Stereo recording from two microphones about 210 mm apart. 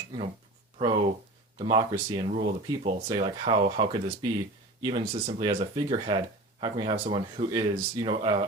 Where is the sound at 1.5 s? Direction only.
20° right (ahead or behind).